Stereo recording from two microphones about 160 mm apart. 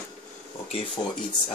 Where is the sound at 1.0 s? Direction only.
30° left (ahead or behind).